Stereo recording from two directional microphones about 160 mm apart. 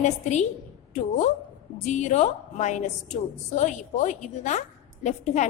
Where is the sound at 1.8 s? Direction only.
45° left (ahead or behind).